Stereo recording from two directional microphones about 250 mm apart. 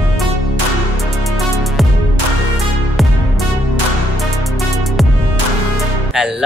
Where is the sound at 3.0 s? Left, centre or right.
Centre.